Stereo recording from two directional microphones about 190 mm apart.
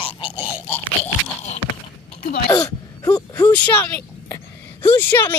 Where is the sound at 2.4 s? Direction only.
20° left (ahead or behind).